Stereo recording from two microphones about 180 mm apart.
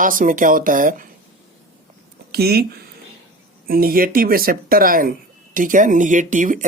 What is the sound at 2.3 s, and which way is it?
Speech, 60° right (ahead or behind).